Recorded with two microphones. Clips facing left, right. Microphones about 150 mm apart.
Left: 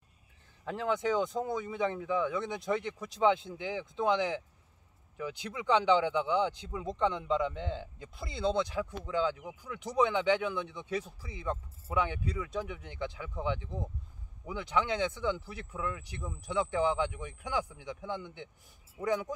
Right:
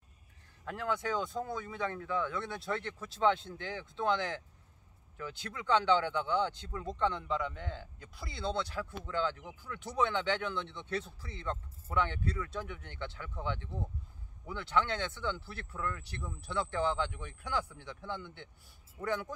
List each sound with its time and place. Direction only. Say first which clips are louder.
0.7 s speech: left 4 dB; 20° left (ahead or behind)